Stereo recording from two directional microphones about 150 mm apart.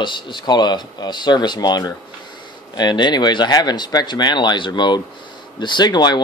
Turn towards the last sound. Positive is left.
turn(degrees=30)  # may be behind; listen again after turning